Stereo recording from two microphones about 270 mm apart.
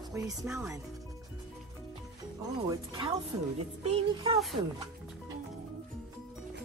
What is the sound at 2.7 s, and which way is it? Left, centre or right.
Speech, centre.